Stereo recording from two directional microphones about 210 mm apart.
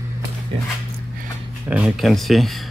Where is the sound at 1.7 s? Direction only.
Centre (ahead or behind).